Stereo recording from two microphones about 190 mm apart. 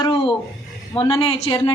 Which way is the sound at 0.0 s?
25° left (ahead or behind).